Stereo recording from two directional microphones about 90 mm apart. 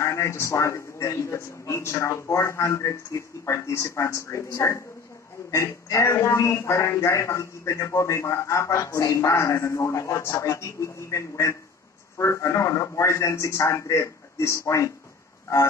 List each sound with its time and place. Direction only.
0.0 s speech: 35° left (ahead or behind)